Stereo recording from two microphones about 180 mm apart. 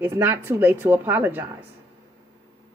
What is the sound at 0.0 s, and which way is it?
A woman's voice, 10° right (ahead or behind).